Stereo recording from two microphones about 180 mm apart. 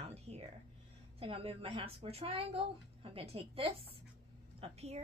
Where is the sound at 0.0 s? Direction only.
35° right (ahead or behind).